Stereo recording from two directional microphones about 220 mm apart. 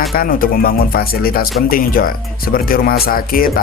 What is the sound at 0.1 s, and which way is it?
Speech, 40° left (ahead or behind).